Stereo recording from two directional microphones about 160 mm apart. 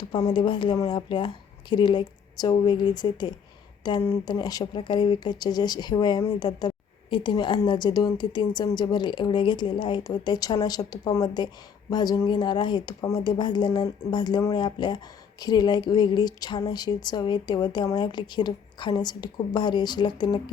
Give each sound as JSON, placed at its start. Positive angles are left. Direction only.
{"t": 0.3, "sound": "speech", "side_deg": 30}